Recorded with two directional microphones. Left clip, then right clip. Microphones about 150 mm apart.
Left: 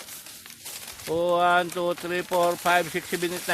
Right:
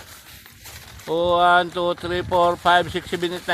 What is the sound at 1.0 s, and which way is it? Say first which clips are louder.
Speech: right 5 dB; 25° right (ahead or behind).